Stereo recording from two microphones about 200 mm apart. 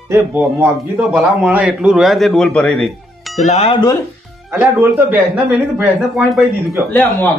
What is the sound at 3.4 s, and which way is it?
Speech, 30° left (ahead or behind).